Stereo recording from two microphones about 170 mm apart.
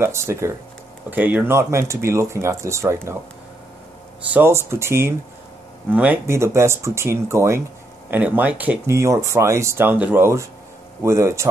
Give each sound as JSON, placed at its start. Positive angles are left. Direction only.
{"t": 0.0, "sound": "speech", "side_deg": -15}
{"t": 4.3, "sound": "speech", "side_deg": -15}